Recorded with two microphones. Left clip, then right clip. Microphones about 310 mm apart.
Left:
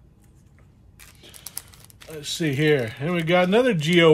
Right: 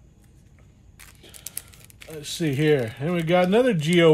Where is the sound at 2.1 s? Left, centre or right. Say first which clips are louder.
Left 1 dB; left.